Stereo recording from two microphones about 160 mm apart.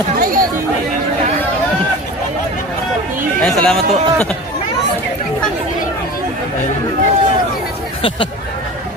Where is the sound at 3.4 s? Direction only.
5° left (ahead or behind).